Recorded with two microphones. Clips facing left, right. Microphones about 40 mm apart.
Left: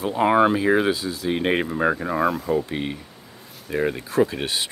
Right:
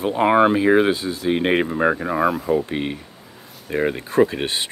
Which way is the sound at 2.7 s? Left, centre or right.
Right.